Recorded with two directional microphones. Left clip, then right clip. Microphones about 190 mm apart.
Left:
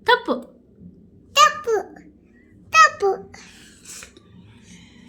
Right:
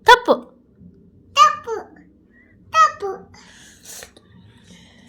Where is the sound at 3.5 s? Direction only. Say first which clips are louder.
Right 1 dB; 35° right (ahead or behind).